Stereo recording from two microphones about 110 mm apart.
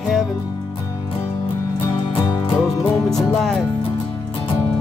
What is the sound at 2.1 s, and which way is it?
Music, 55° left (ahead or behind).